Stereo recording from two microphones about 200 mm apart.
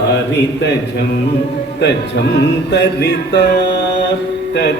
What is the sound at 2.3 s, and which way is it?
Mantra, 60° left (ahead or behind).